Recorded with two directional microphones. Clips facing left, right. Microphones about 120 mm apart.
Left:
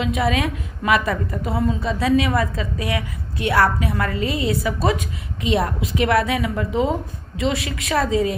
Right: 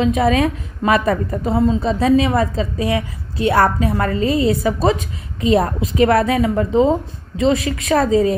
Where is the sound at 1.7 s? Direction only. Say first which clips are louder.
Right 4 dB; 40° right (ahead or behind).